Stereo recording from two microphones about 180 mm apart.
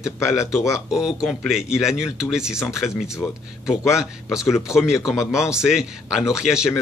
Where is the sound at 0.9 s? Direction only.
5° right (ahead or behind).